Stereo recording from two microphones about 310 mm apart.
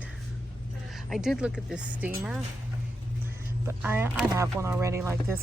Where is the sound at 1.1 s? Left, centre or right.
Centre.